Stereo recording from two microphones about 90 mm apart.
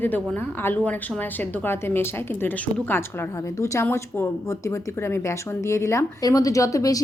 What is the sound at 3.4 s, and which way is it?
Speech, 35° left (ahead or behind).